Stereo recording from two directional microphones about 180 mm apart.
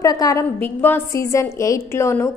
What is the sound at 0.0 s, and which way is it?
A woman's voice, 20° left (ahead or behind).